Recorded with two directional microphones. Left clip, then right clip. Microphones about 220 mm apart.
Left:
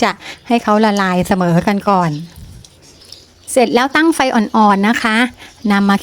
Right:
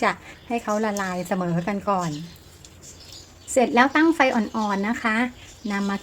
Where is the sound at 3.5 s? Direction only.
35° left (ahead or behind).